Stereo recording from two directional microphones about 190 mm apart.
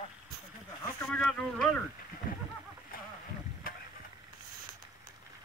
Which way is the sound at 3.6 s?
50° left (ahead or behind).